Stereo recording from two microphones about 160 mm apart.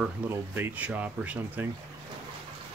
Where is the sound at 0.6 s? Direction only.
10° right (ahead or behind).